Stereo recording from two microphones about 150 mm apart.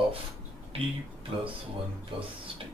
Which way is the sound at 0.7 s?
40° right (ahead or behind).